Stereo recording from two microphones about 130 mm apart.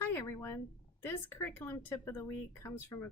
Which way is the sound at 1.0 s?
15° left (ahead or behind).